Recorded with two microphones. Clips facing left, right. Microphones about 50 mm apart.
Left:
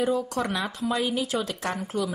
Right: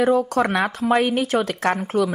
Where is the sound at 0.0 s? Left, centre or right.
Right.